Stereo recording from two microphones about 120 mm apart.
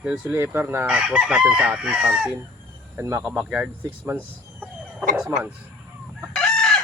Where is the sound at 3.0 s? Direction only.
20° right (ahead or behind).